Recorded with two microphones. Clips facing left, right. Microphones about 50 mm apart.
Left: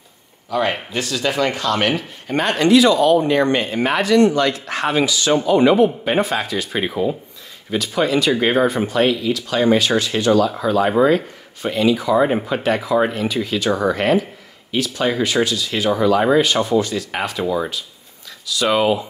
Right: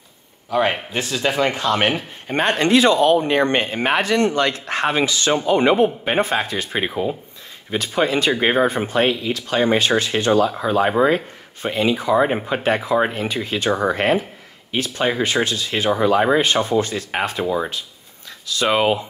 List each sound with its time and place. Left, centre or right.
0.5 s speech: right